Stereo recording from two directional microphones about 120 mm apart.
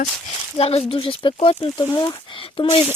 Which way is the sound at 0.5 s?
55° left (ahead or behind).